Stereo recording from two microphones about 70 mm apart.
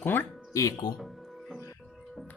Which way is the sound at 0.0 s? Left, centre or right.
Left.